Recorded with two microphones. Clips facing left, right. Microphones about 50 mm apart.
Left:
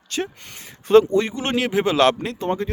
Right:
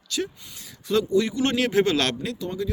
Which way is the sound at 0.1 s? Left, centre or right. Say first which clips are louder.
Left 2 dB; left.